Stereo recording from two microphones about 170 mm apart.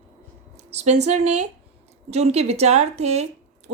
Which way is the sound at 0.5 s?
40° right (ahead or behind).